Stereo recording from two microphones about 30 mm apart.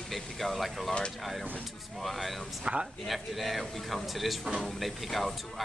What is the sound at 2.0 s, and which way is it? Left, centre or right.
Speech, centre.